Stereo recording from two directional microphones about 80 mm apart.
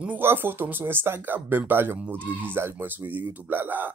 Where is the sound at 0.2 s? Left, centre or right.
Right.